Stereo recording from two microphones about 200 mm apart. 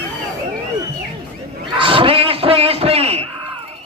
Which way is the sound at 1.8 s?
25° right (ahead or behind).